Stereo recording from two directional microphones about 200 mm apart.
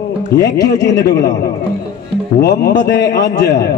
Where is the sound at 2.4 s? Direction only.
50° left (ahead or behind).